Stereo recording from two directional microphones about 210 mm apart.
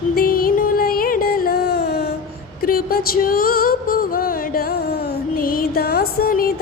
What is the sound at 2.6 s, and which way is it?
Music, 45° left (ahead or behind).